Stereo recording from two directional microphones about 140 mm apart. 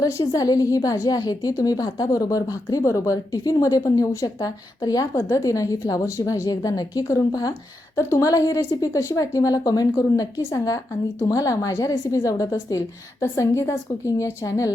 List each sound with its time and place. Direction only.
0.0 s a woman's voice: 25° left (ahead or behind)